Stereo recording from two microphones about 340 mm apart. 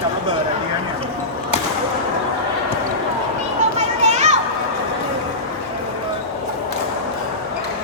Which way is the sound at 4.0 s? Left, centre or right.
Centre.